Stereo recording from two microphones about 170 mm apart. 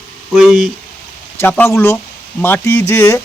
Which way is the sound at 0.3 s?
5° right (ahead or behind).